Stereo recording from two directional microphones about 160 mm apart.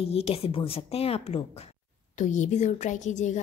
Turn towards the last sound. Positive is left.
turn(degrees=50)  # may be behind; listen again after turning